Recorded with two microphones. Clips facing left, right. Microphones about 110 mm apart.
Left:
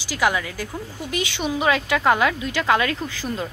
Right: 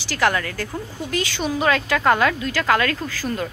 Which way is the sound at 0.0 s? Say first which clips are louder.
Right 1 dB; 10° left (ahead or behind).